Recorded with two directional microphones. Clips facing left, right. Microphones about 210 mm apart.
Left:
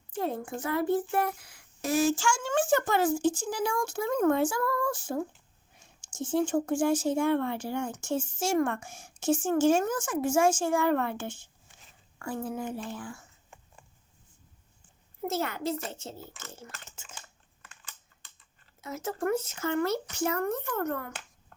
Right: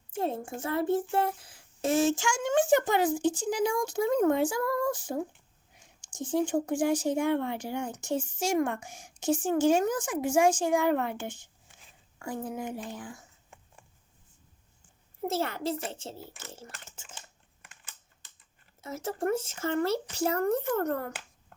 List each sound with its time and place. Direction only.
0.2 s a child's voice: 25° right (ahead or behind)
15.3 s speech: 30° right (ahead or behind)
18.8 s speech: 25° right (ahead or behind)